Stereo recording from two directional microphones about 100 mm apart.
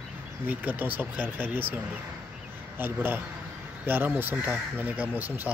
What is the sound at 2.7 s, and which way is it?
Speech, 20° right (ahead or behind).